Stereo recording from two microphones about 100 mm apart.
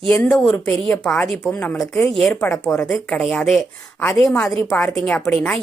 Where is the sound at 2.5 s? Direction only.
20° left (ahead or behind).